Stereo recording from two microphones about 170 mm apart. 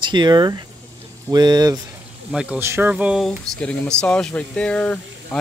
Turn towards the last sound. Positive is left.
turn(degrees=5)  # may be behind; listen again after turning